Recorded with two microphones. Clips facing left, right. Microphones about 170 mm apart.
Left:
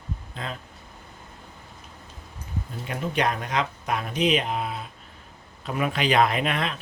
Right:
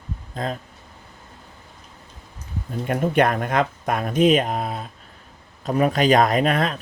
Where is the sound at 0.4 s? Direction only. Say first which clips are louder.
Right 8 dB; 40° right (ahead or behind).